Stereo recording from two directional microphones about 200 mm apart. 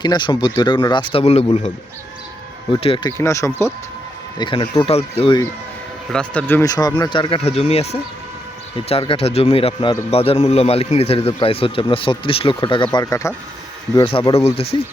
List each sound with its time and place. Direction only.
0.0 s a man's voice: 20° left (ahead or behind)
2.8 s a man's voice: 25° left (ahead or behind)
3.2 s a man's voice: 15° left (ahead or behind)
6.1 s a man's voice: 5° left (ahead or behind)
13.9 s a man's voice: 25° left (ahead or behind)